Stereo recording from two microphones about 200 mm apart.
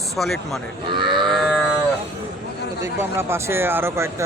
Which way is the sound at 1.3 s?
Centre (ahead or behind).